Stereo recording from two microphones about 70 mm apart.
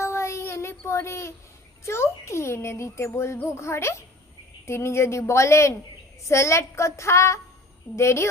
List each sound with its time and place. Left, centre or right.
0.0 s child singing: left
0.9 s a child's voice: left